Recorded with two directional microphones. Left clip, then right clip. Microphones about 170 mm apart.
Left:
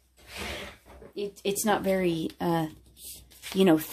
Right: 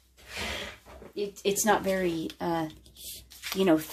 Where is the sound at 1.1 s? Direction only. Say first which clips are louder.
Right 2 dB; 20° left (ahead or behind).